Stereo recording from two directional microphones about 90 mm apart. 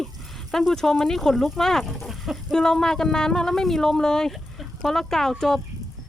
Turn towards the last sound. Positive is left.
turn(degrees=5)  # may be behind; listen again after turning